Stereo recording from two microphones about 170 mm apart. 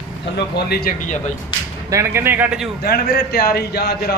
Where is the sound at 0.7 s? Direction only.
60° left (ahead or behind).